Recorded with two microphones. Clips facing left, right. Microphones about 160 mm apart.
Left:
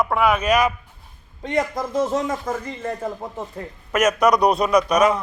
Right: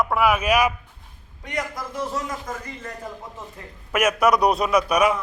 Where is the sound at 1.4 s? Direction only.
25° left (ahead or behind).